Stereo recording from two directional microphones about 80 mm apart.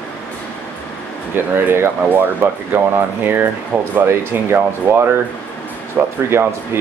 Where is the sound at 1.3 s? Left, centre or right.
Right.